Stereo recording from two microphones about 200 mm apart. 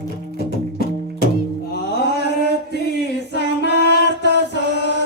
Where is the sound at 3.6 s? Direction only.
55° left (ahead or behind).